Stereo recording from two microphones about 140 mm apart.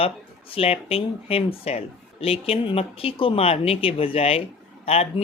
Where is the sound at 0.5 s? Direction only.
45° left (ahead or behind).